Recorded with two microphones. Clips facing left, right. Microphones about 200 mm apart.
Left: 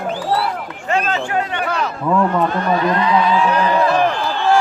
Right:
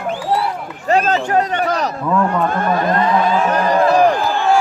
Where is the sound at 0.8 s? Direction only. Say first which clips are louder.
Right 4 dB; 40° right (ahead or behind).